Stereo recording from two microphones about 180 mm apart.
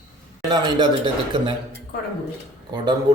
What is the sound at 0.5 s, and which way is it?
Speech, 25° right (ahead or behind).